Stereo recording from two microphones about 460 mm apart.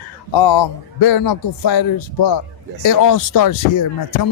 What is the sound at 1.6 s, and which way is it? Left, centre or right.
Speech, left.